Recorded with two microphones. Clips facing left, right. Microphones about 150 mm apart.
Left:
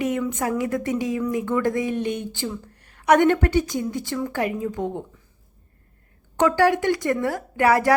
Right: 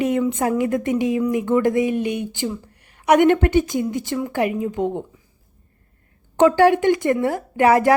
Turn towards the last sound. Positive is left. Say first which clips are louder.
# right 3 dB
turn(degrees=-20)  # may be behind; listen again after turning